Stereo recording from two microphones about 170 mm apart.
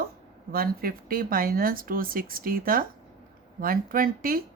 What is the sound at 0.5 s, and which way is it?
Speech, 60° right (ahead or behind).